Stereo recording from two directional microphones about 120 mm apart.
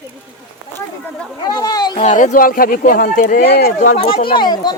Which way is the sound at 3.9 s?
50° left (ahead or behind).